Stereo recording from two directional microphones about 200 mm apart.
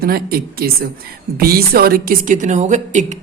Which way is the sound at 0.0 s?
50° right (ahead or behind).